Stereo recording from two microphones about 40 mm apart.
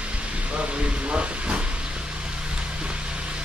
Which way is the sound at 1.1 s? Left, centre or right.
Right.